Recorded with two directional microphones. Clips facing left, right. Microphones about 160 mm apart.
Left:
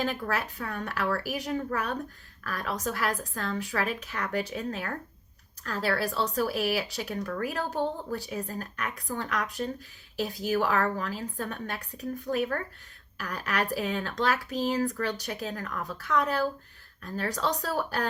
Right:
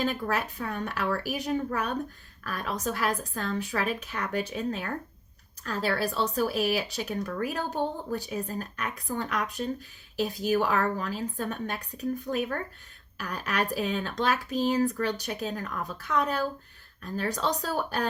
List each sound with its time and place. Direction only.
0.0 s speech: 20° right (ahead or behind)